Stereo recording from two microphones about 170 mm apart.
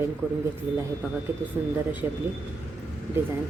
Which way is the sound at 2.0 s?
15° right (ahead or behind).